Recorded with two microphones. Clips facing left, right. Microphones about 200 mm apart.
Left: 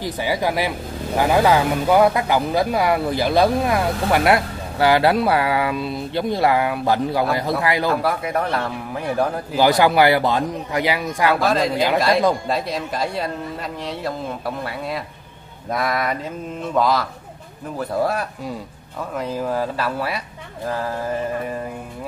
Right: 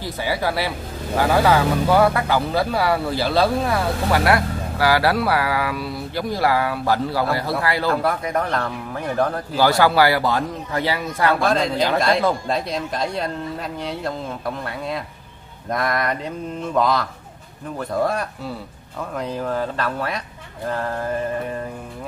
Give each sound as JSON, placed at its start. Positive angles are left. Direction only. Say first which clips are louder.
{"t": 0.0, "sound": "speech", "louder": "left 2 dB", "side_deg": 15}
{"t": 7.9, "sound": "speech", "louder": "even", "side_deg": 5}
{"t": 11.3, "sound": "speech", "louder": "left 1 dB", "side_deg": 5}